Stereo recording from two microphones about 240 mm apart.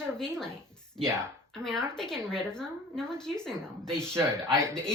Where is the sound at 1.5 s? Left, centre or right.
Centre.